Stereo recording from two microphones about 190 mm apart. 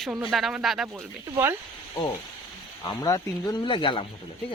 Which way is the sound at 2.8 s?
20° left (ahead or behind).